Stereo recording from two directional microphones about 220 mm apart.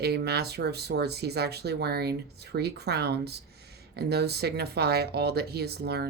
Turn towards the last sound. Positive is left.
turn(degrees=-45)  # may be behind; listen again after turning